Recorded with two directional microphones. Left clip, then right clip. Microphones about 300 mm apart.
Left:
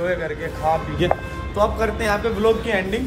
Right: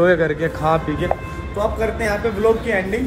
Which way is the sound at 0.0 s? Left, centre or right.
Right.